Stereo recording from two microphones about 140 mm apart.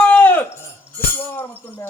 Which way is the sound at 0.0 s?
10° left (ahead or behind).